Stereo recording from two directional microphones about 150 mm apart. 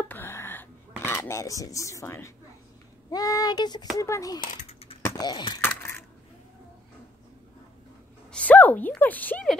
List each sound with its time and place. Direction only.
0.0 s a sound: 15° left (ahead or behind)
3.1 s speech: 25° left (ahead or behind)
4.6 s typing: 40° left (ahead or behind)
5.0 s speech: 25° left (ahead or behind)
5.6 s crushing: 15° left (ahead or behind)
8.3 s a woman's voice: 10° left (ahead or behind)